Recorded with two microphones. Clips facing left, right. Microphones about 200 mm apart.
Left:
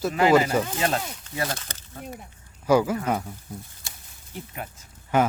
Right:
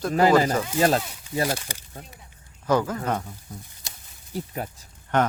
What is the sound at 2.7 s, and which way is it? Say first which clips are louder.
Speech: left 2 dB; 10° left (ahead or behind).